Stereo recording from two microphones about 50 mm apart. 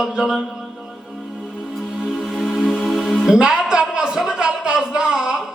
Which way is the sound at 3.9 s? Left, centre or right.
Centre.